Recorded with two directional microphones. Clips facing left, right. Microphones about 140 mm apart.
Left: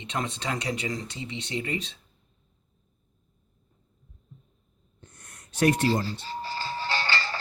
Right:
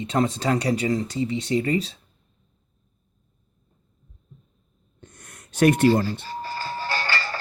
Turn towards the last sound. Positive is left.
turn(degrees=-40)  # may be behind; listen again after turning